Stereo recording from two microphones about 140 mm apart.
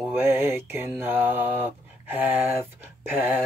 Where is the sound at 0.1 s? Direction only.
15° right (ahead or behind).